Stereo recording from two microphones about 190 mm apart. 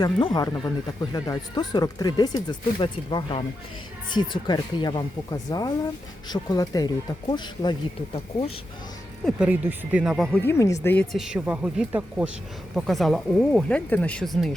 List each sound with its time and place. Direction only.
0.0 s speech: 20° left (ahead or behind)
9.2 s speech: 5° right (ahead or behind)
10.4 s speech: 15° left (ahead or behind)